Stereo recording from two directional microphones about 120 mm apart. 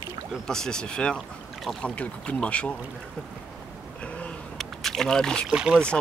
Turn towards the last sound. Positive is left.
turn(degrees=-5)  # may be behind; listen again after turning